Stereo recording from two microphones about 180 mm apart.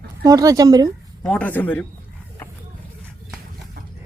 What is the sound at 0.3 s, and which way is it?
Speech, 20° right (ahead or behind).